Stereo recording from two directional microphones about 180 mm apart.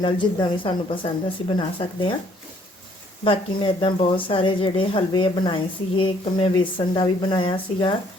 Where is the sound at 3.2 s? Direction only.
30° left (ahead or behind).